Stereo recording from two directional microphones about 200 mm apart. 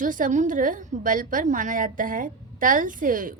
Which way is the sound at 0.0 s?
40° right (ahead or behind).